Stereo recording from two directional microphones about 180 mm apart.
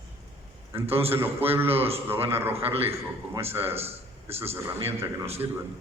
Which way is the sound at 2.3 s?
15° right (ahead or behind).